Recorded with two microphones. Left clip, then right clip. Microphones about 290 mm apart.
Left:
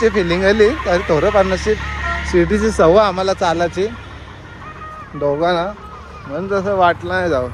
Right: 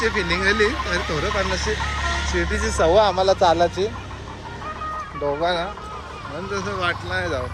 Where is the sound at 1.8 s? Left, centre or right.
Right.